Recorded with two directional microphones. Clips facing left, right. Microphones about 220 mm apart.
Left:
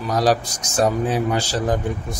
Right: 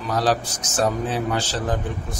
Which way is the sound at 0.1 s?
10° left (ahead or behind).